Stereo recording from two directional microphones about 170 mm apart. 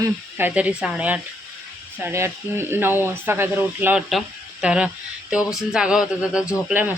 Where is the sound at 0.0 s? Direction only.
10° right (ahead or behind).